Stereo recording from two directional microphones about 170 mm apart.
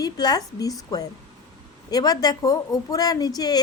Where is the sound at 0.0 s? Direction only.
25° left (ahead or behind).